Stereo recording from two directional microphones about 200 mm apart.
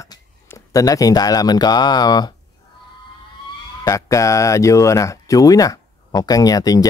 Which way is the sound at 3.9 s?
15° left (ahead or behind).